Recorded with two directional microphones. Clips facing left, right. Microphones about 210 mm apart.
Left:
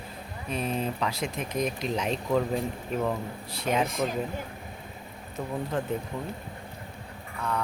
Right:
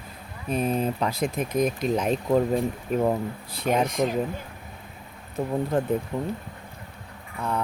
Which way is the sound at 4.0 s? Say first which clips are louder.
Right 4 dB; 30° right (ahead or behind).